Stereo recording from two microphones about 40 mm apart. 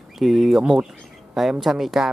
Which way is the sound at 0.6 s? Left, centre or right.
Centre.